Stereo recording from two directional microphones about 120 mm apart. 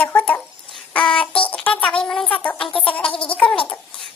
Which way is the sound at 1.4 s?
10° left (ahead or behind).